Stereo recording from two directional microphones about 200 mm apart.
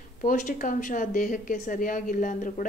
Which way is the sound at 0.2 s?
40° left (ahead or behind).